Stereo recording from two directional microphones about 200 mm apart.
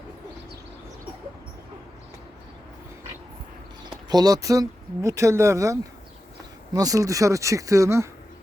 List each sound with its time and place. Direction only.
4.1 s speech: 20° right (ahead or behind)